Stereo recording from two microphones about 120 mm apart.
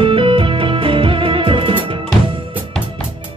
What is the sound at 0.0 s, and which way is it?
Music, 45° right (ahead or behind).